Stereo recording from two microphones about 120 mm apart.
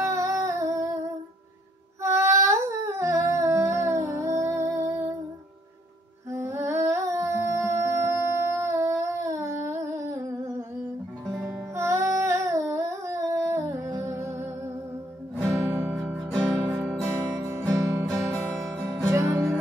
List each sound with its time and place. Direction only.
0.0 s a sound: 25° right (ahead or behind)
6.3 s music: 20° right (ahead or behind)
11.7 s a sound: 25° right (ahead or behind)
14.0 s music: 20° right (ahead or behind)
16.2 s music: centre (ahead or behind)
16.6 s music: 20° right (ahead or behind)